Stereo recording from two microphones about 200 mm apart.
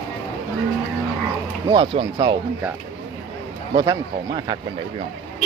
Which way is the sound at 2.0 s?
20° right (ahead or behind).